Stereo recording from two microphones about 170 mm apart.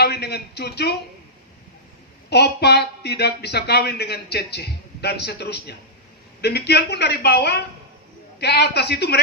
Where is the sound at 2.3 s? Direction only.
75° left (ahead or behind).